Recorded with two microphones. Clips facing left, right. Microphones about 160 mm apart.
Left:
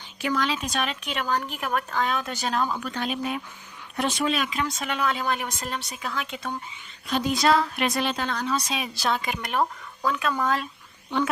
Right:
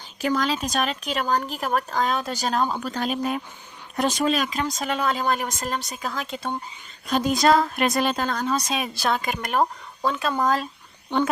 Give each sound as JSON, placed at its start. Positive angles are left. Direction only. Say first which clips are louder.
{"t": 0.2, "sound": "speech", "louder": "right 3 dB", "side_deg": -40}
{"t": 7.1, "sound": "speech", "louder": "right 3 dB", "side_deg": -45}
{"t": 10.0, "sound": "speech", "louder": "right 2 dB", "side_deg": -30}